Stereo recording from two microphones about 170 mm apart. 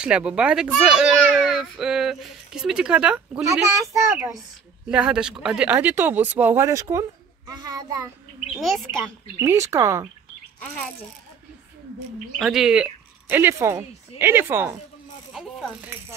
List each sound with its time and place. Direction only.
0.0 s a child's voice: 5° right (ahead or behind); by 8.1 s 25° right (ahead or behind)
8.5 s a child's voice: centre (ahead or behind)
9.4 s speech: 15° right (ahead or behind)
12.4 s a child's voice: centre (ahead or behind)
13.3 s speech: 15° right (ahead or behind)